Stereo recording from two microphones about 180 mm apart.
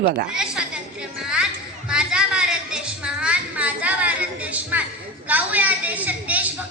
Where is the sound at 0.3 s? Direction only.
5° right (ahead or behind).